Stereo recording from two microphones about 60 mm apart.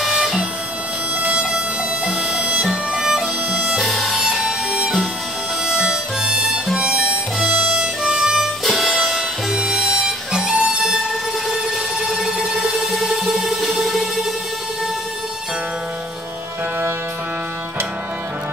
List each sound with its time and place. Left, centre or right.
0.0 s music: centre
2.4 s music: right
2.7 s music: centre
3.7 s music: centre
5.7 s harmonica: centre
10.6 s music: centre